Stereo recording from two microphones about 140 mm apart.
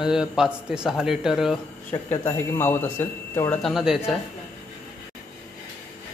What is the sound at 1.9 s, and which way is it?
Speech, 15° left (ahead or behind).